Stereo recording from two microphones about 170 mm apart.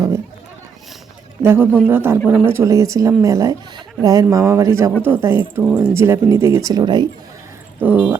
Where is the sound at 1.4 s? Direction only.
15° right (ahead or behind).